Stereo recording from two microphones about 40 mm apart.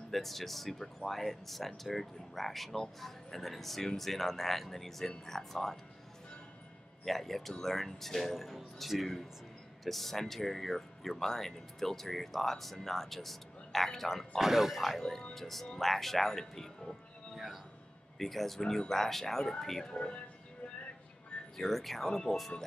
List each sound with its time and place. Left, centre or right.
0.1 s speech: centre
7.1 s speech: centre
14.4 s speech: centre
14.8 s speech: centre
18.2 s speech: centre
19.9 s speech: left
21.5 s speech: centre